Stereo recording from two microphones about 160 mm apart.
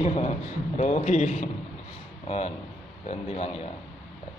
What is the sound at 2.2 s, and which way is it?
A man's voice, 40° left (ahead or behind).